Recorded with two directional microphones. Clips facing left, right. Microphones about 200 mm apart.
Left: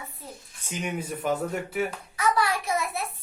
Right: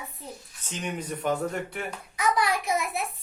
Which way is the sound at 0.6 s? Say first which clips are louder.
Left 2 dB; 10° left (ahead or behind).